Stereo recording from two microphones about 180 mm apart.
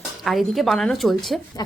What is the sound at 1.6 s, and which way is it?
Speech, 20° left (ahead or behind).